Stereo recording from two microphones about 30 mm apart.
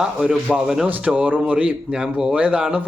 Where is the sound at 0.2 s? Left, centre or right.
Right.